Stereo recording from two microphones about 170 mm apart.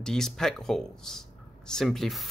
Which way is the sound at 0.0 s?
Centre (ahead or behind).